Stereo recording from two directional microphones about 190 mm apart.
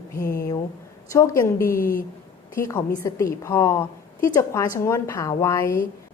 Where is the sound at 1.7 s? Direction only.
50° left (ahead or behind).